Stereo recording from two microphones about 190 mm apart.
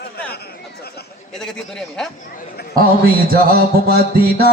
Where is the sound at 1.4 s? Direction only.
5° left (ahead or behind).